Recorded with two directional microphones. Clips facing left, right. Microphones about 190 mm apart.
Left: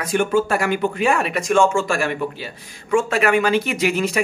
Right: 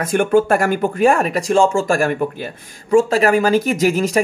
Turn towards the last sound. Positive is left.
turn(degrees=-40)  # may be behind; listen again after turning